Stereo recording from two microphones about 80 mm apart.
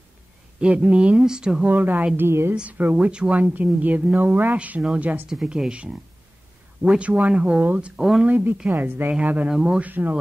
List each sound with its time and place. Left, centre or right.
0.6 s speech: centre
1.7 s a woman's voice: right
2.8 s speech: centre
5.3 s speech: centre
7.9 s speech: centre
8.3 s speech: right